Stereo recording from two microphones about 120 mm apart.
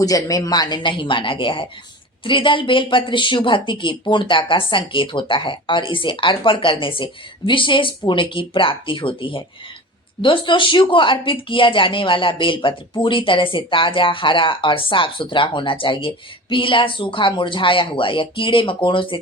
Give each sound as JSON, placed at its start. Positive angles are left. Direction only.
{"t": 0.0, "sound": "speech", "side_deg": 30}